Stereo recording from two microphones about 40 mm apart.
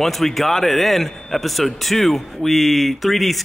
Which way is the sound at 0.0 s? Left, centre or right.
Centre.